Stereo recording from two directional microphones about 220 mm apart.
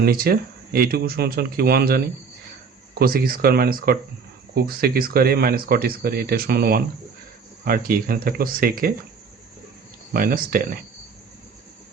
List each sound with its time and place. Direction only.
0.0 s speech: 45° right (ahead or behind)
3.0 s speech: 40° right (ahead or behind)
10.1 s speech: 40° right (ahead or behind)